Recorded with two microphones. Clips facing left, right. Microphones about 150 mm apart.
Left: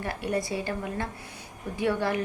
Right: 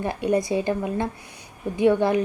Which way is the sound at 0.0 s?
20° right (ahead or behind).